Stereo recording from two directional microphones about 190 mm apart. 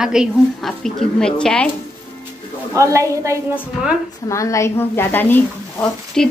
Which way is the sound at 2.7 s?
15° right (ahead or behind).